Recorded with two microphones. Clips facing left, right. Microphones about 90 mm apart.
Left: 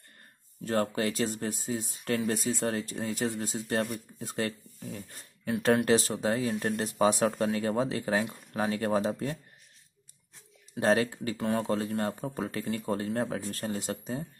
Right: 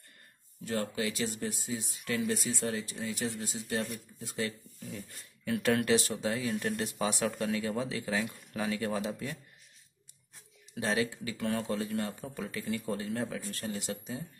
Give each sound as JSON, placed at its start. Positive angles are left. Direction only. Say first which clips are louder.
{"t": 0.7, "sound": "speech", "louder": "left 5 dB", "side_deg": 45}
{"t": 5.5, "sound": "speech", "louder": "left 3 dB", "side_deg": 25}
{"t": 5.9, "sound": "speech", "louder": "left 3 dB", "side_deg": 35}
{"t": 10.7, "sound": "speech", "louder": "left 6 dB", "side_deg": 45}
{"t": 11.3, "sound": "speech", "louder": "left 3 dB", "side_deg": 25}
{"t": 11.7, "sound": "speech", "louder": "left 4 dB", "side_deg": 40}